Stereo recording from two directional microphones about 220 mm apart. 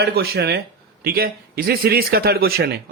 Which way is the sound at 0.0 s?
45° right (ahead or behind).